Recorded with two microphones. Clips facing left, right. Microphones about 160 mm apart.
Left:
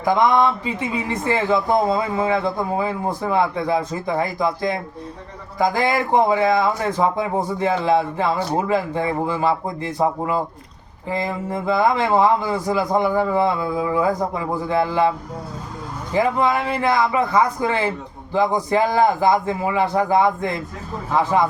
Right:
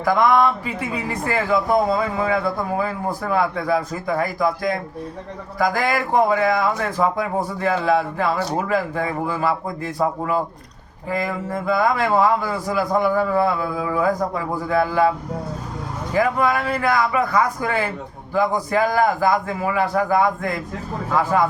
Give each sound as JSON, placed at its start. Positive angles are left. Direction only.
{"t": 0.0, "sound": "speech", "side_deg": 25}
{"t": 16.1, "sound": "speech", "side_deg": 25}